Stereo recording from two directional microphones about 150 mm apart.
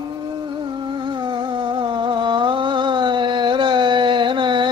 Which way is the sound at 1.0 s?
30° right (ahead or behind).